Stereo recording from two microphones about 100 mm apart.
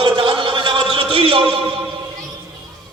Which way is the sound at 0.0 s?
55° right (ahead or behind).